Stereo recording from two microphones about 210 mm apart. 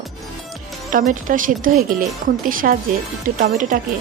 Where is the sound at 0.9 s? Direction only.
40° right (ahead or behind).